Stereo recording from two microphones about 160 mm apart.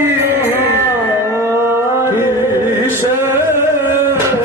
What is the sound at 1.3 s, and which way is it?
Chant, 15° right (ahead or behind).